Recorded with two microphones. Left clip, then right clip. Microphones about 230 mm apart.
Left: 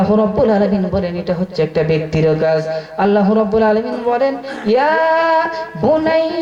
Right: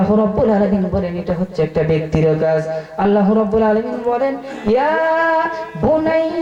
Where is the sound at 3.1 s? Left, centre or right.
Left.